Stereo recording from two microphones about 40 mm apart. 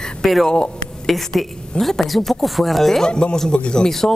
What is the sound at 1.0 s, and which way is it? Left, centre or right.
A woman's voice, centre.